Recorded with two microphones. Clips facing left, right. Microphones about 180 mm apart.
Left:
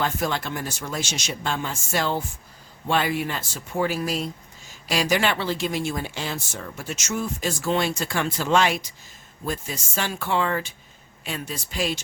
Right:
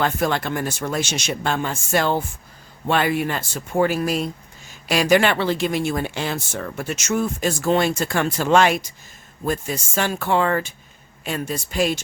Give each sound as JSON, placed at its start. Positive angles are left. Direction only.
{"t": 0.0, "sound": "speech", "side_deg": -55}